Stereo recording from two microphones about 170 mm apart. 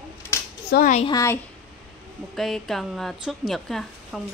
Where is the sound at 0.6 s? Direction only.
65° left (ahead or behind).